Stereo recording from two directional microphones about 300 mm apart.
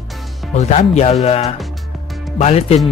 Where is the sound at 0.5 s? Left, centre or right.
Left.